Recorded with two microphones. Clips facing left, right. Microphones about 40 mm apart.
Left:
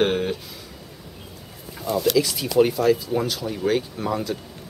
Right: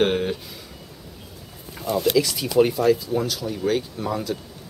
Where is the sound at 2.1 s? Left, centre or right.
Centre.